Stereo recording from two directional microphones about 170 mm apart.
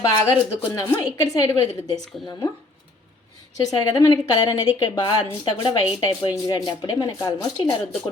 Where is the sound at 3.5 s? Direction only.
20° left (ahead or behind).